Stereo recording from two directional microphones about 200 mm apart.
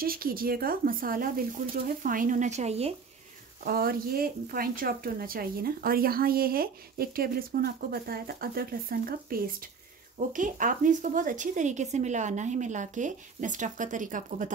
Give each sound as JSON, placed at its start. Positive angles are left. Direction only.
{"t": 0.0, "sound": "speech", "side_deg": -45}
{"t": 3.6, "sound": "speech", "side_deg": -50}